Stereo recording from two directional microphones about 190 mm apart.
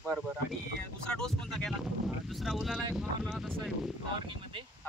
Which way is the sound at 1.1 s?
5° left (ahead or behind).